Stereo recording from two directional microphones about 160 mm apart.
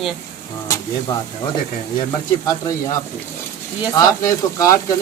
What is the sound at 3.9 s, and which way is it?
Speech, 20° left (ahead or behind).